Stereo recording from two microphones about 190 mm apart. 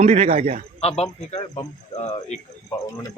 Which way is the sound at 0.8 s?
35° left (ahead or behind).